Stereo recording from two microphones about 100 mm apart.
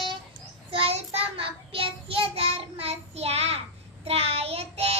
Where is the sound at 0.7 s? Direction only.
70° right (ahead or behind).